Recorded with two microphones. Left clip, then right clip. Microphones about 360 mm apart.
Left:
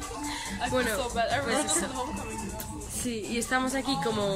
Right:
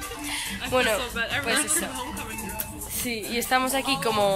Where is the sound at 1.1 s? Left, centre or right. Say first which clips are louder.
Right 2 dB; left.